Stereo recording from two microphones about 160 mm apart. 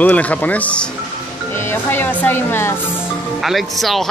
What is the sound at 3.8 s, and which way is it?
Speech, centre (ahead or behind).